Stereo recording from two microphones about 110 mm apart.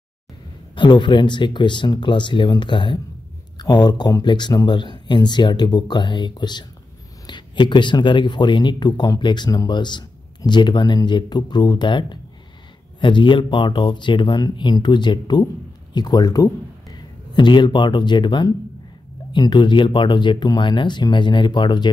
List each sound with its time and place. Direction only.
0.7 s speech: 45° left (ahead or behind)